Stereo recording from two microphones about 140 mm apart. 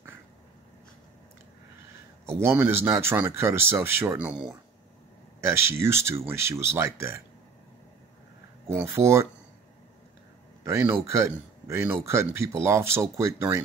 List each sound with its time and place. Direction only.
2.2 s speech: 20° right (ahead or behind)
5.4 s speech: 20° right (ahead or behind)
8.9 s speech: 20° right (ahead or behind)
10.6 s speech: 20° right (ahead or behind)